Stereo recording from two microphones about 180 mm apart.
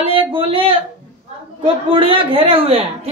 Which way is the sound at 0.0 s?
30° right (ahead or behind).